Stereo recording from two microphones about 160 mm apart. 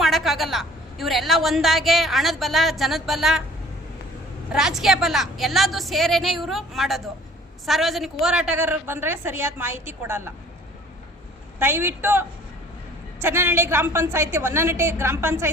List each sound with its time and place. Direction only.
0.0 s a woman's voice: centre (ahead or behind)
4.5 s a woman's voice: 5° right (ahead or behind)
11.6 s a woman's voice: 15° right (ahead or behind)
13.2 s a woman's voice: 15° right (ahead or behind)